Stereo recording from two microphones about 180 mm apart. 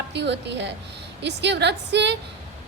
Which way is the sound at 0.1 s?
75° right (ahead or behind).